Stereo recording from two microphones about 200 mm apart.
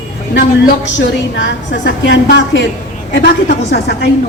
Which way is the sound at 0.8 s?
60° left (ahead or behind).